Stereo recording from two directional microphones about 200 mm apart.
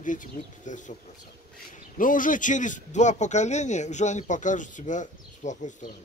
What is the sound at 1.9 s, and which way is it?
A man's voice, 40° left (ahead or behind).